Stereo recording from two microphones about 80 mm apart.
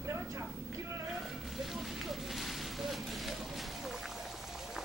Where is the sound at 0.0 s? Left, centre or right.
Right.